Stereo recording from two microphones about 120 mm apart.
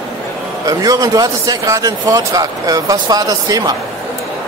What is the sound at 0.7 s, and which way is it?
A man's voice, 30° right (ahead or behind).